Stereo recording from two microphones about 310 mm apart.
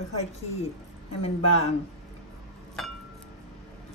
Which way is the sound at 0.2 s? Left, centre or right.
Left.